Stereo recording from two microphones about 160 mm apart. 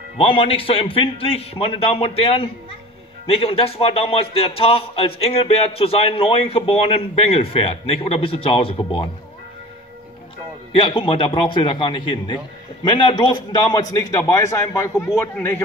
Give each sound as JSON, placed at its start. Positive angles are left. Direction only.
{"t": 0.2, "sound": "a man's voice", "side_deg": 35}
{"t": 10.7, "sound": "a man's voice", "side_deg": 30}